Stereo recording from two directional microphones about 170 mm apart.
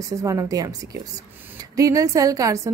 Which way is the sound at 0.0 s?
20° right (ahead or behind).